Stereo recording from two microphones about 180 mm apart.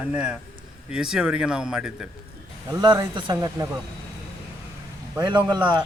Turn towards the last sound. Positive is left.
turn(degrees=-25)  # may be behind; listen again after turning